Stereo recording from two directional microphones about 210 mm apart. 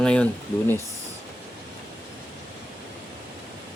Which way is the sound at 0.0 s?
5° left (ahead or behind).